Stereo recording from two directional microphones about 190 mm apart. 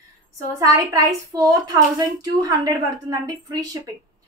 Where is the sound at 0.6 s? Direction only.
15° right (ahead or behind).